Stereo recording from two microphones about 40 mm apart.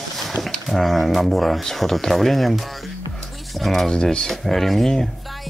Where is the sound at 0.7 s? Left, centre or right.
Centre.